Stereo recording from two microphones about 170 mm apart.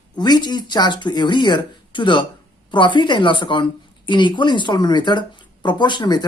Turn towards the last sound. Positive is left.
turn(degrees=25)  # may be behind; listen again after turning